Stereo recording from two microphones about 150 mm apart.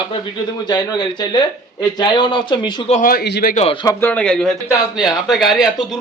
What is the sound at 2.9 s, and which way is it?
Speech, 70° left (ahead or behind).